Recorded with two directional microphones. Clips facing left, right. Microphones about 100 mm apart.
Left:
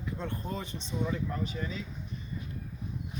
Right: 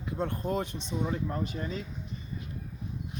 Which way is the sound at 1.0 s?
35° right (ahead or behind).